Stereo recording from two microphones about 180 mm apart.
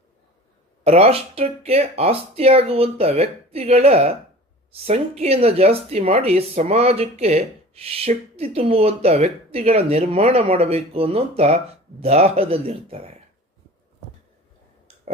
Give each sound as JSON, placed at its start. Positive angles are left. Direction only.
{"t": 0.9, "sound": "speech", "side_deg": -35}